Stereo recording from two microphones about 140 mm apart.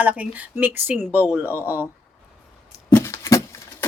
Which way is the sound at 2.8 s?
20° left (ahead or behind).